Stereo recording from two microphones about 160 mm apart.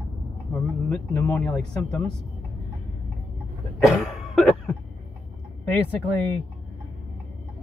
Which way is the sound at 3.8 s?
Centre (ahead or behind).